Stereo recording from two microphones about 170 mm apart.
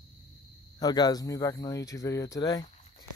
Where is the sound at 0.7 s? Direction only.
25° left (ahead or behind).